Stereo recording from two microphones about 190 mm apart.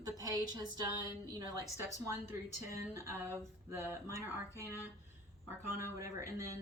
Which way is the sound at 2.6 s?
15° right (ahead or behind).